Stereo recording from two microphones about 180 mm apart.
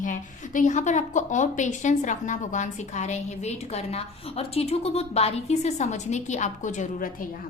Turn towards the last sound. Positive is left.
turn(degrees=45)  # may be behind; listen again after turning